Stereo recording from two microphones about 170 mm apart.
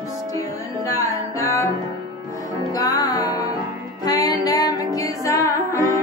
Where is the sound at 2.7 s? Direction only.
20° left (ahead or behind).